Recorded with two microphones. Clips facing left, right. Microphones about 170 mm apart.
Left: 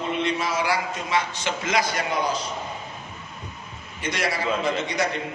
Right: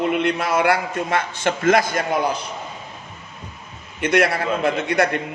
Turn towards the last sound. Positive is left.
turn(degrees=-60)  # may be behind; listen again after turning